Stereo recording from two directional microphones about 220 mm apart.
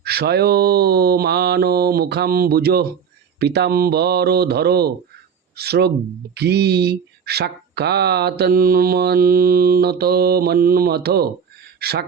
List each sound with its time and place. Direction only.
0.0 s speech: 45° right (ahead or behind)